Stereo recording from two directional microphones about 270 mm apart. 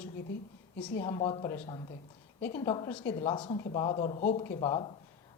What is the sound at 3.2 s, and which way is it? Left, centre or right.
A woman's voice, centre.